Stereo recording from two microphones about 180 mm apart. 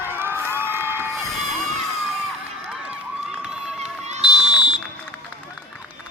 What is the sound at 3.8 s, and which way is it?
Run, 40° right (ahead or behind).